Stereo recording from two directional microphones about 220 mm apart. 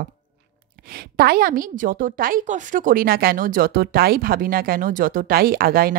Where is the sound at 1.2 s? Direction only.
40° right (ahead or behind).